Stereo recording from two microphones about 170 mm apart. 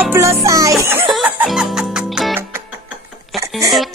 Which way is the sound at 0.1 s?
15° right (ahead or behind).